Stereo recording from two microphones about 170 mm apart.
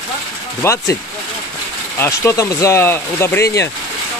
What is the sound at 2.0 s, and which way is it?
Speech, 15° left (ahead or behind).